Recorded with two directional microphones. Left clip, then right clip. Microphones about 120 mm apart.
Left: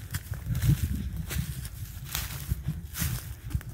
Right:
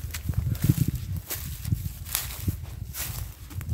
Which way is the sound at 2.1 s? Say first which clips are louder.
Right 2 dB; 30° right (ahead or behind).